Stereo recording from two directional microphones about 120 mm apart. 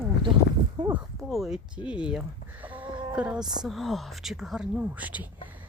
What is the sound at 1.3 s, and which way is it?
Speech, 5° right (ahead or behind).